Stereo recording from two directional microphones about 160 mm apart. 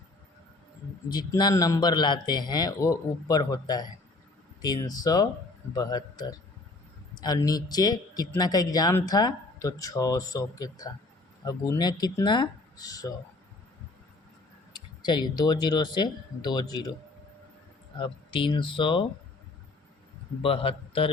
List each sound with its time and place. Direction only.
1.0 s a man's voice: 25° left (ahead or behind)
14.7 s speech: 30° left (ahead or behind)
18.0 s speech: 30° left (ahead or behind)
20.4 s speech: 35° left (ahead or behind)